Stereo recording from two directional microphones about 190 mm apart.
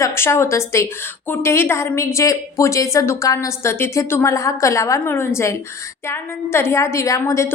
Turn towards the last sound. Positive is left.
turn(degrees=15)  # may be behind; listen again after turning